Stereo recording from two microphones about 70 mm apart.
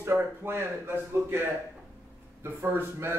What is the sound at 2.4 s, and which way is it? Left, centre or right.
Speech, right.